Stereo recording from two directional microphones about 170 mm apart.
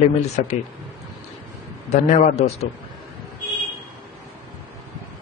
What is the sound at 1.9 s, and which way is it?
Speech, 40° left (ahead or behind).